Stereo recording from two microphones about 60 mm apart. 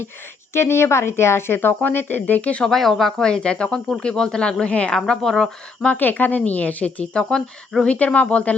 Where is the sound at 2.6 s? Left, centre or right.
Centre.